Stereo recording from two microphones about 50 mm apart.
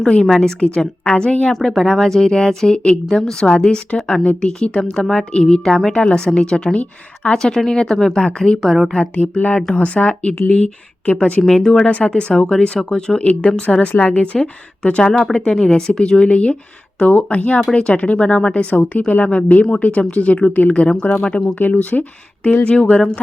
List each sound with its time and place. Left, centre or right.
0.0 s a woman's voice: centre
1.7 s a woman's voice: centre; by 11.4 s left
11.4 s a woman's voice: centre
11.9 s a woman's voice: left
20.8 s a woman's voice: centre
21.7 s a woman's voice: left